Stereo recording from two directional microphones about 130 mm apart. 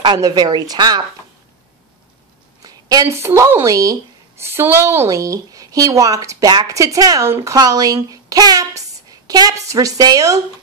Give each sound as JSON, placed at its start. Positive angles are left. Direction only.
{"t": 0.0, "sound": "a woman's voice", "side_deg": -35}
{"t": 2.6, "sound": "speech", "side_deg": -30}